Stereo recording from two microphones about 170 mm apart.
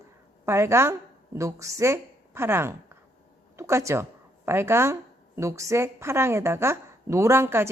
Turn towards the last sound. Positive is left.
turn(degrees=-15)  # may be behind; listen again after turning